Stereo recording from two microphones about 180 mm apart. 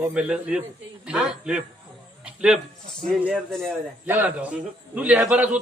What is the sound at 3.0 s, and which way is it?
A man's voice, centre (ahead or behind).